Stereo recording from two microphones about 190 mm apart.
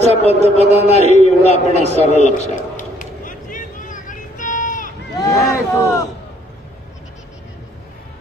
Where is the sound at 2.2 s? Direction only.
40° left (ahead or behind).